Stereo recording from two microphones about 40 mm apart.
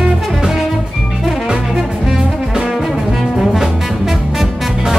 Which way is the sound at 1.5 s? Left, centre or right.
Centre.